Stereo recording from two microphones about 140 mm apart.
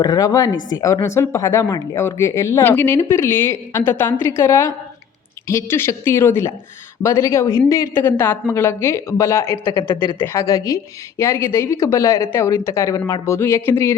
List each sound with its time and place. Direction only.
0.0 s a woman's voice: 30° left (ahead or behind)